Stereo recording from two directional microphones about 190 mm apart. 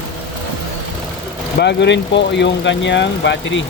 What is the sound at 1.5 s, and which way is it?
Speech, 65° left (ahead or behind).